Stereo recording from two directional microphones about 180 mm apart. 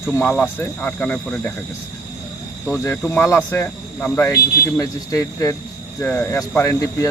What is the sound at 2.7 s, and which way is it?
Speech, 15° left (ahead or behind).